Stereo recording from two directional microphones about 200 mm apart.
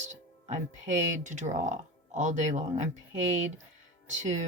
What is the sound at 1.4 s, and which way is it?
Speech, 40° right (ahead or behind).